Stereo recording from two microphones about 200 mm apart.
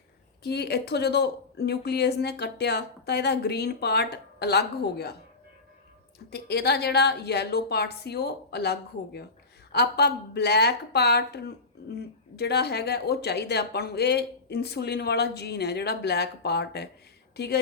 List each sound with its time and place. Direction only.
0.4 s a woman's voice: 55° left (ahead or behind)
6.3 s a woman's voice: 55° left (ahead or behind)